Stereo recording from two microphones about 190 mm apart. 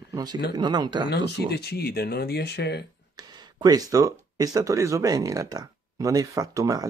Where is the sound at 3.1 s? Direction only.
20° right (ahead or behind).